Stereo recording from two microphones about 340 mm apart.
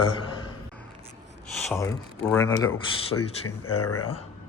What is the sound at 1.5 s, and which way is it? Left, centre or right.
Speech, centre.